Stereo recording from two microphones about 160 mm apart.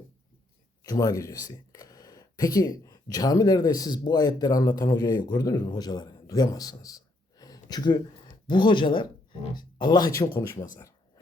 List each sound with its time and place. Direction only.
0.9 s speech: 20° left (ahead or behind)